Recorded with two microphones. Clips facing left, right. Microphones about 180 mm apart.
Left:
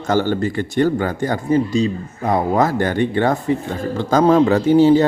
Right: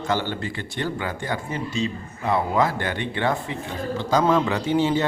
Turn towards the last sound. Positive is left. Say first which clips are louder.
# left 10 dB
turn(degrees=40)  # may be behind; listen again after turning